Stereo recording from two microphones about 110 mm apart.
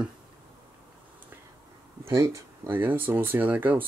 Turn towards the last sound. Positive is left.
turn(degrees=-15)  # may be behind; listen again after turning